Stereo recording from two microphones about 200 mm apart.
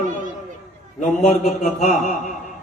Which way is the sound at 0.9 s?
35° left (ahead or behind).